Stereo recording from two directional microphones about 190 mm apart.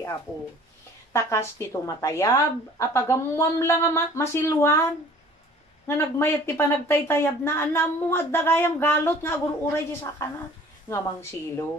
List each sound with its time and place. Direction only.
1.1 s a woman's voice: 15° left (ahead or behind)
5.9 s a woman's voice: 15° left (ahead or behind)